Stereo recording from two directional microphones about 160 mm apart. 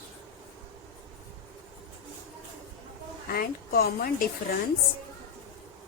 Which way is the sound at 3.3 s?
65° left (ahead or behind).